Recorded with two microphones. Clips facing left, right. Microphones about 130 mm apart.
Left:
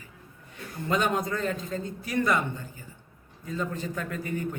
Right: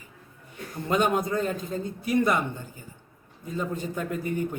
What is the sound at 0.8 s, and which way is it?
A man's voice, 15° right (ahead or behind).